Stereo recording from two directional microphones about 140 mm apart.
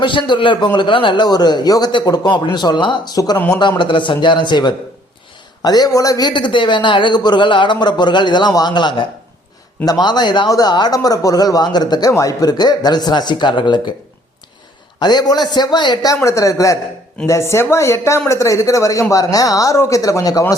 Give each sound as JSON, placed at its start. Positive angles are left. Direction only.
{"t": 0.0, "sound": "a man's voice", "side_deg": 35}
{"t": 3.3, "sound": "speech", "side_deg": 15}
{"t": 3.6, "sound": "a man's voice", "side_deg": 35}
{"t": 14.9, "sound": "speech", "side_deg": 30}